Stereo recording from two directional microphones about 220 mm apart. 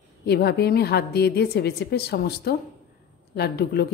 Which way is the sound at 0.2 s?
45° left (ahead or behind).